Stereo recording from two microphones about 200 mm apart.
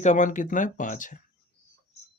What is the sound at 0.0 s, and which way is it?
Speech, 40° left (ahead or behind).